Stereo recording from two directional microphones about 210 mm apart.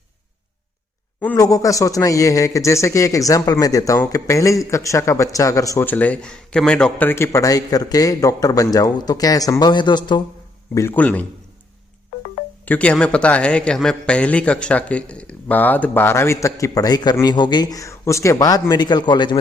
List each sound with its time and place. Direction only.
1.2 s a man's voice: 10° left (ahead or behind)
10.8 s a man's voice: 10° left (ahead or behind)
12.6 s a man's voice: 5° left (ahead or behind)